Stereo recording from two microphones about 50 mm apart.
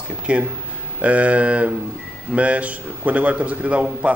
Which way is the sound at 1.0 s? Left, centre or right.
Right.